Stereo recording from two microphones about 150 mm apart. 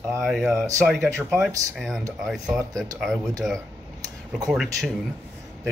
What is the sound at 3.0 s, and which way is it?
Speech, centre (ahead or behind).